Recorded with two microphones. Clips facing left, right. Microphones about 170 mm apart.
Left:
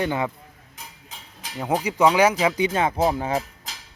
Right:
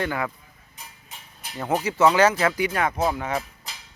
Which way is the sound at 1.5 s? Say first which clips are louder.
Left 1 dB; 10° left (ahead or behind).